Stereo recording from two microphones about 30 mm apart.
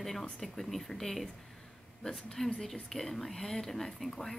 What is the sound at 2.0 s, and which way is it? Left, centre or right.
Speech, centre.